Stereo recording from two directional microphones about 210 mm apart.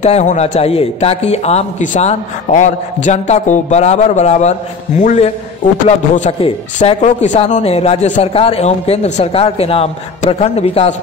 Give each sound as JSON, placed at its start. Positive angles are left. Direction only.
{"t": 0.0, "sound": "a man's voice", "side_deg": 35}